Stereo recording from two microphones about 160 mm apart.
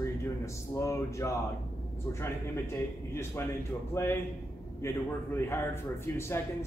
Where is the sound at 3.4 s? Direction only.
15° left (ahead or behind).